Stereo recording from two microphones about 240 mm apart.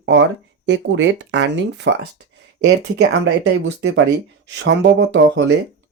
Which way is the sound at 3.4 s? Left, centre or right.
Right.